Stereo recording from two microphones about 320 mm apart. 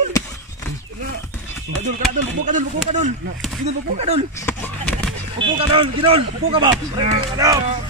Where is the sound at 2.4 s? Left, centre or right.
Right.